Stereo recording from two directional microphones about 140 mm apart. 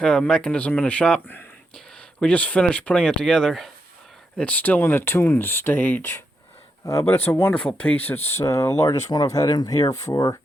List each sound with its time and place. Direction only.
0.0 s speech: 5° left (ahead or behind)
7.3 s speech: 15° left (ahead or behind)